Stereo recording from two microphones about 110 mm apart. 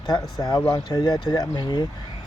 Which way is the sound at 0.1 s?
40° left (ahead or behind).